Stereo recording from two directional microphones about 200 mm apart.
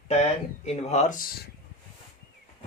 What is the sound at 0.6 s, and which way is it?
Speech, 35° left (ahead or behind).